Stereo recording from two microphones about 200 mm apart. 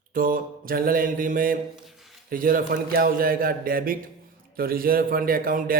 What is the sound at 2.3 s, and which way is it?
A man's voice, 45° right (ahead or behind).